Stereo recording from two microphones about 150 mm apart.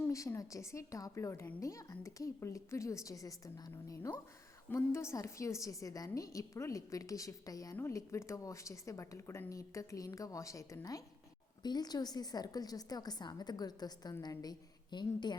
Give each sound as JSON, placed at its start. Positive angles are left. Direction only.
{"t": 0.1, "sound": "a woman's voice", "side_deg": 20}